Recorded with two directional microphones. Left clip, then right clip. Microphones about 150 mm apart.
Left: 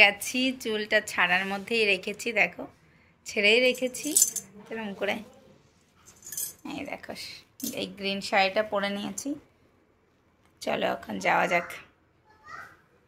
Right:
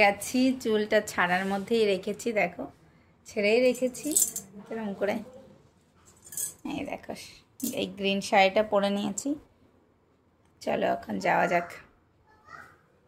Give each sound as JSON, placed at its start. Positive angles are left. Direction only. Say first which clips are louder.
{"t": 0.0, "sound": "a woman's voice", "louder": "left 2 dB", "side_deg": -10}
{"t": 3.3, "sound": "a woman's voice", "louder": "left 2 dB", "side_deg": 0}
{"t": 6.4, "sound": "speech", "louder": "right 3 dB", "side_deg": -25}
{"t": 10.6, "sound": "speech", "louder": "right 1 dB", "side_deg": -20}